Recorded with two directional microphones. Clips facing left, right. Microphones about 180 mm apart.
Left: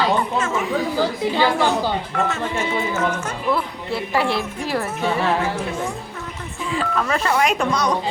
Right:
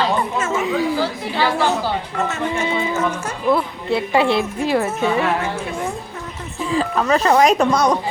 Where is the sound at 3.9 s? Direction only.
20° right (ahead or behind).